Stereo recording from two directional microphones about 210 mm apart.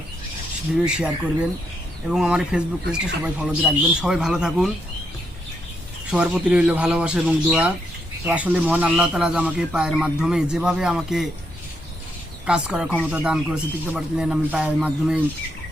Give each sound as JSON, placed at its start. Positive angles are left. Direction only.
{"t": 0.9, "sound": "speech", "side_deg": -5}
{"t": 6.1, "sound": "speech", "side_deg": -5}
{"t": 12.5, "sound": "speech", "side_deg": -5}